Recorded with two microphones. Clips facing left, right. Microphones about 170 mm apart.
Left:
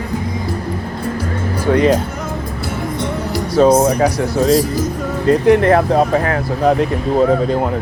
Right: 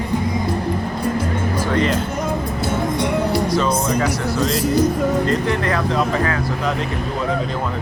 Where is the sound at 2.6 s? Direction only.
25° right (ahead or behind).